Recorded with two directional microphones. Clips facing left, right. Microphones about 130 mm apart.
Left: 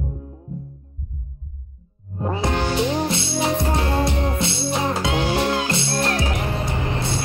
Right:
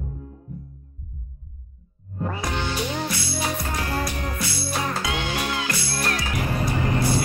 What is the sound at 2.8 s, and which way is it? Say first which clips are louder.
Music: left 6 dB; 25° left (ahead or behind).